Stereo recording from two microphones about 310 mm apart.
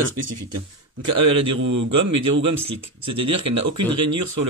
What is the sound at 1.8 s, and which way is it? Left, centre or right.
Speech, right.